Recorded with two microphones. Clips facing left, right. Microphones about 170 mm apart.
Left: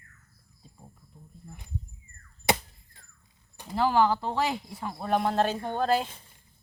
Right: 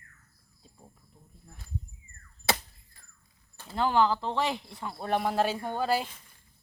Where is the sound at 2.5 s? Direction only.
20° left (ahead or behind).